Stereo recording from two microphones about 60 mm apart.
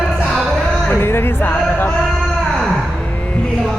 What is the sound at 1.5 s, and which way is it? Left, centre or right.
Male singing, left.